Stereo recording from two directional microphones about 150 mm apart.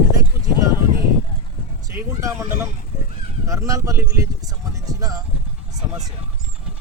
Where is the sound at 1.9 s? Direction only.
20° right (ahead or behind).